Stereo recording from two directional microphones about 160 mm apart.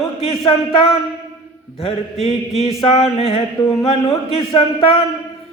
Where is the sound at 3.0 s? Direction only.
35° left (ahead or behind).